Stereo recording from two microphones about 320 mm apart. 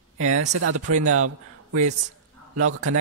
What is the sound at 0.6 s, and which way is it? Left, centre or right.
A man's voice, right.